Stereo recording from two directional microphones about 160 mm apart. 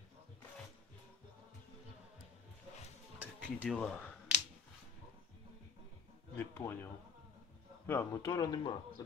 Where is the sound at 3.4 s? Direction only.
Centre (ahead or behind).